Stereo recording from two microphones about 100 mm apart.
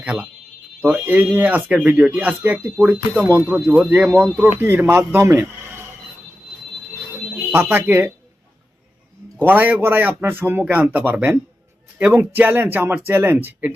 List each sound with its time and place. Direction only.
0.0 s speech: 10° right (ahead or behind)
7.3 s speech: 25° right (ahead or behind)
9.4 s speech: 20° right (ahead or behind)